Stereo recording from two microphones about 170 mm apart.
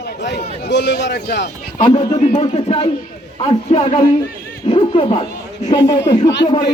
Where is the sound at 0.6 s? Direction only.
75° left (ahead or behind).